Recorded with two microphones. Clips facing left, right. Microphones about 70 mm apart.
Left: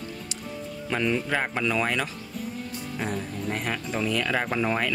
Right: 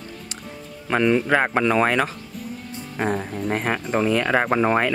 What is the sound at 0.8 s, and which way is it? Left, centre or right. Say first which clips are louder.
Speech: right 7 dB; right.